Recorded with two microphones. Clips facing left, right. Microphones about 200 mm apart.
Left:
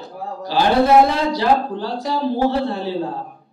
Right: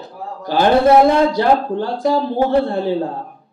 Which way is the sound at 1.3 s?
50° right (ahead or behind).